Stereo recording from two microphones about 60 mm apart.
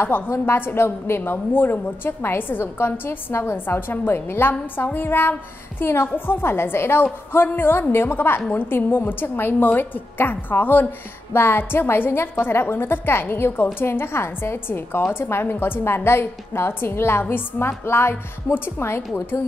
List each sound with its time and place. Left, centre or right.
0.0 s a woman's voice: left